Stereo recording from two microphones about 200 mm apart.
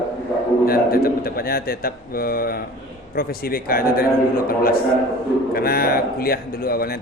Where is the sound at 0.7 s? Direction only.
50° left (ahead or behind).